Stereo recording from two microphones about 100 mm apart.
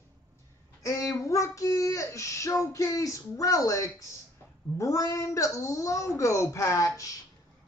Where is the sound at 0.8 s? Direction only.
35° left (ahead or behind).